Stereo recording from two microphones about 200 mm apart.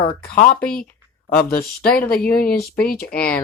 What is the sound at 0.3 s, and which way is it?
Speech, 45° left (ahead or behind).